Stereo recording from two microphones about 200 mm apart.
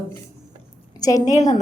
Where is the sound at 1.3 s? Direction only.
35° left (ahead or behind).